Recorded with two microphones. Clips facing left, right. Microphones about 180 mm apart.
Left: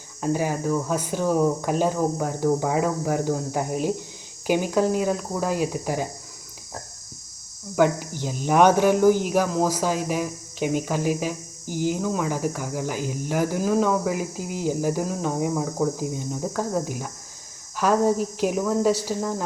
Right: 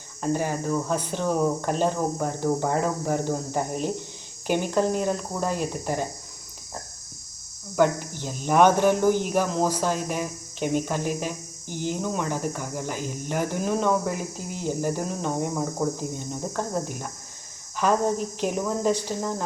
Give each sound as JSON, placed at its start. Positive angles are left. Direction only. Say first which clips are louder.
{"t": 0.2, "sound": "speech", "louder": "left 2 dB", "side_deg": 5}
{"t": 7.8, "sound": "speech", "louder": "left 1 dB", "side_deg": 10}